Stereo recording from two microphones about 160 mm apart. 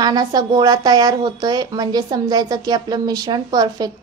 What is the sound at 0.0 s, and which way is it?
Speech, 25° right (ahead or behind).